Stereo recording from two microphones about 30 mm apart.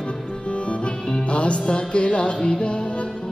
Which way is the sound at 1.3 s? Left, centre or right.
Left.